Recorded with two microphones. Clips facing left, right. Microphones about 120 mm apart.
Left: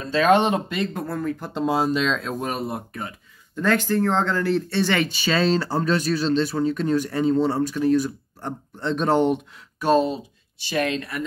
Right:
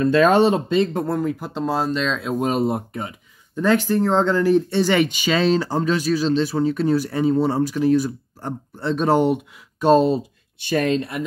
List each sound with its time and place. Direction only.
0.0 s speech: 50° right (ahead or behind)
0.3 s speech: 30° right (ahead or behind)
1.5 s speech: 5° left (ahead or behind)
2.4 s speech: 25° right (ahead or behind)
9.9 s speech: 40° right (ahead or behind)